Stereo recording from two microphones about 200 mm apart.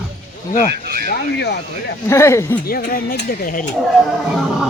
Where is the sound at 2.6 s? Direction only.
45° left (ahead or behind).